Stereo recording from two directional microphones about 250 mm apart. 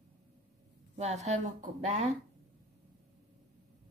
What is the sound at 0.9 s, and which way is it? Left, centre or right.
A woman's voice, right.